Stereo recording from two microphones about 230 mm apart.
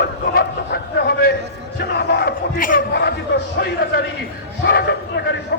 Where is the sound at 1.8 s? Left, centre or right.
Left.